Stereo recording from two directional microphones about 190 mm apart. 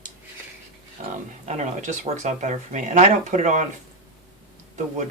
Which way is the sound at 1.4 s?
40° right (ahead or behind).